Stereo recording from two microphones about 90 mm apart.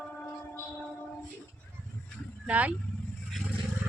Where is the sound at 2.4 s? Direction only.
15° right (ahead or behind).